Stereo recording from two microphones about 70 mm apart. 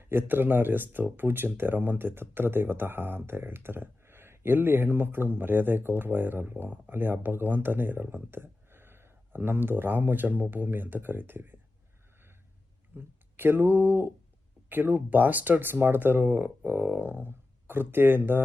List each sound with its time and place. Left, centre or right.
0.0 s speech: right
13.0 s speech: right